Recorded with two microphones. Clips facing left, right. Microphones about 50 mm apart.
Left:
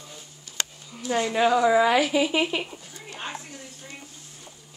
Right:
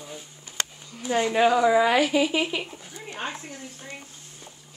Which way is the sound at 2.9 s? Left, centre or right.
Right.